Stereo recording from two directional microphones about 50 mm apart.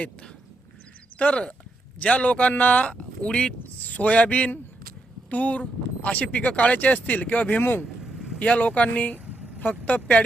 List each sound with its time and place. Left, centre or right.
1.2 s speech: left
3.2 s speech: centre
3.8 s speech: left
7.6 s speech: left
8.0 s vehicle: centre
8.4 s speech: left
9.1 s vehicle: right
9.6 s speech: left